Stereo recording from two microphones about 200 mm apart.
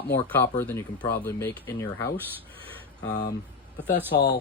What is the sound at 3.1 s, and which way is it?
Speech, 40° left (ahead or behind).